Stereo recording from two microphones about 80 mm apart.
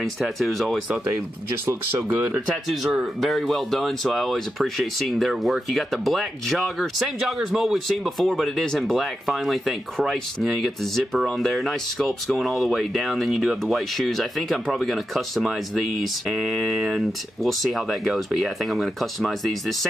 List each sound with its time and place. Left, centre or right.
0.0 s speech: centre
1.7 s speech: right
2.7 s speech: centre